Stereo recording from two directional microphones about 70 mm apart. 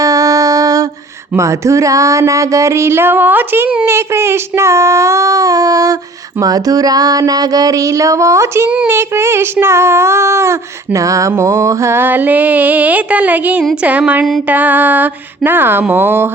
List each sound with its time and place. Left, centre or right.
0.0 s a sound: right
1.4 s music: right
3.8 s music: right
6.4 s a sound: right
8.9 s child singing: right
14.4 s mantra: right
15.4 s child singing: right
15.9 s mantra: right